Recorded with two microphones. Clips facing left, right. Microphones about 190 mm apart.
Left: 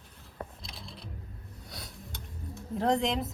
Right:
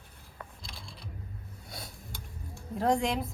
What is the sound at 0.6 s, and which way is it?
Mechanisms, centre (ahead or behind).